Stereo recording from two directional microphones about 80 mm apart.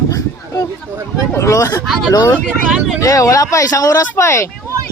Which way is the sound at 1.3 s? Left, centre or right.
Left.